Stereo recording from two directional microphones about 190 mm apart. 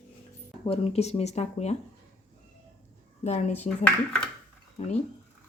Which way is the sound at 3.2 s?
35° left (ahead or behind).